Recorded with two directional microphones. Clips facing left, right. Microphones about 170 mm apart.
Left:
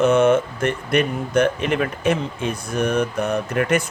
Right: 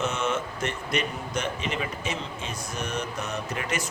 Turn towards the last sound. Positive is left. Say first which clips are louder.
# left 11 dB
turn(degrees=55)  # may be behind; listen again after turning